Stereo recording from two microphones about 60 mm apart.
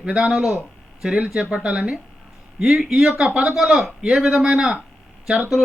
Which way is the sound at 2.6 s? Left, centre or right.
Centre.